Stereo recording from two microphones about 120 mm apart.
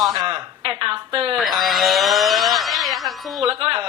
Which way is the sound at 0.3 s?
50° right (ahead or behind).